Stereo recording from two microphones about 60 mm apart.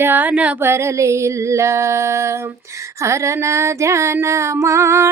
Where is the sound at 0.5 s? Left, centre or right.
Right.